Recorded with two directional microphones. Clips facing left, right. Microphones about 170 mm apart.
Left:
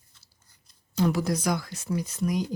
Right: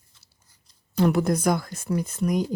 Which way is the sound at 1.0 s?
55° right (ahead or behind).